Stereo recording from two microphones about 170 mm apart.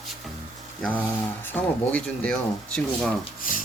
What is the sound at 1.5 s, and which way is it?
Speech, 10° left (ahead or behind).